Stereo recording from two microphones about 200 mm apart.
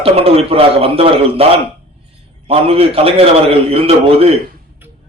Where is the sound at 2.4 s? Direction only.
30° right (ahead or behind).